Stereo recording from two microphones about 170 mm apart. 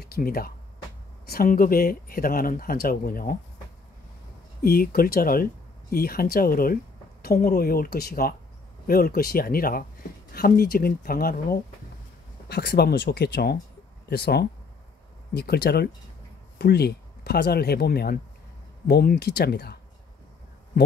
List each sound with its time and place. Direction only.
0.0 s speech: 60° left (ahead or behind)
4.6 s speech: 60° left (ahead or behind)
12.4 s speech: 70° left (ahead or behind)